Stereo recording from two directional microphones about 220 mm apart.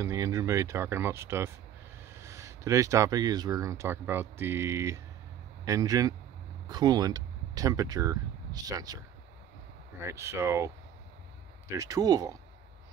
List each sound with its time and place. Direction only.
0.0 s speech: 15° right (ahead or behind)
10.0 s speech: 10° right (ahead or behind)